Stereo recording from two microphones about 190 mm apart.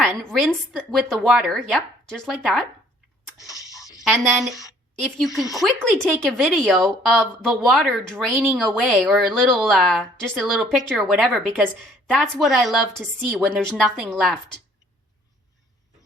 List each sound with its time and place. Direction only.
0.3 s speech: centre (ahead or behind)
3.8 s a sound: 20° left (ahead or behind)
4.4 s speech: centre (ahead or behind)